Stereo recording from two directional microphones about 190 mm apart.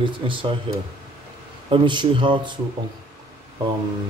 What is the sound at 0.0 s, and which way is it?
Speech, 25° right (ahead or behind).